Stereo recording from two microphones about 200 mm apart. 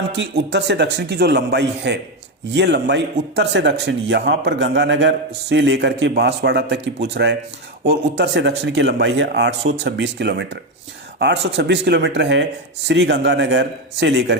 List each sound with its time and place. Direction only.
0.2 s a man's voice: 60° right (ahead or behind)